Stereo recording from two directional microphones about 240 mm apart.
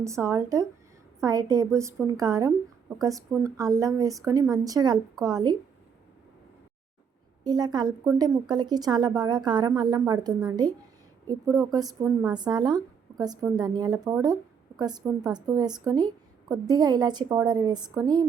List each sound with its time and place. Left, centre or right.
0.0 s a woman's voice: centre
7.4 s a woman's voice: centre